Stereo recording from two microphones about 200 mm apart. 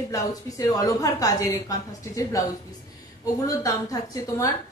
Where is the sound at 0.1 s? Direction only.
15° left (ahead or behind).